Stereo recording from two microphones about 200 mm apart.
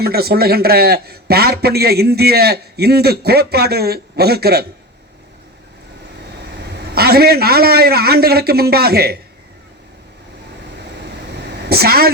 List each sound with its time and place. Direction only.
0.0 s a man's voice: 50° right (ahead or behind)
6.7 s a man's voice: 50° right (ahead or behind)
11.6 s a woman's voice: 50° right (ahead or behind)